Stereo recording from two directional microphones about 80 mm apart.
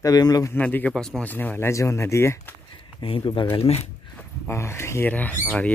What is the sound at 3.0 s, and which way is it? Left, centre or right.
Speech, left.